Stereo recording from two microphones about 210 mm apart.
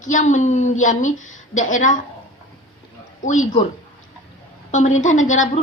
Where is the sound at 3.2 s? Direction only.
35° left (ahead or behind).